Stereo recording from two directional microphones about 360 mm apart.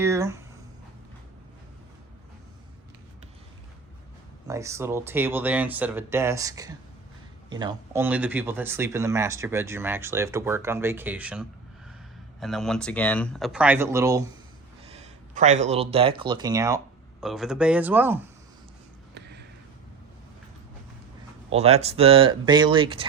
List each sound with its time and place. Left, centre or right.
0.0 s speech: centre
4.4 s speech: centre
14.9 s speech: centre
19.1 s a sound: right
21.5 s speech: centre